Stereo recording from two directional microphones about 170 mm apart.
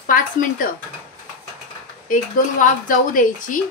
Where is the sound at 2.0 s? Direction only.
55° left (ahead or behind).